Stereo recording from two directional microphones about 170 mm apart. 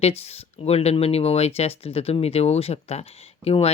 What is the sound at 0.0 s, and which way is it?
A woman's voice, 35° left (ahead or behind).